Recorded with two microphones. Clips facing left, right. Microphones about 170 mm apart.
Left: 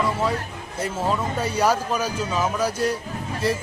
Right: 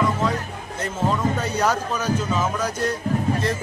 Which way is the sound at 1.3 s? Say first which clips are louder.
Left 1 dB; 10° left (ahead or behind).